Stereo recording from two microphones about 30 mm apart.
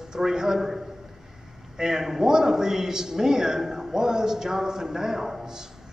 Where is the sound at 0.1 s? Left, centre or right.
Right.